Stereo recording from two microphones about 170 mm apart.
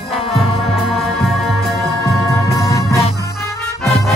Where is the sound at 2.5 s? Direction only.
20° left (ahead or behind).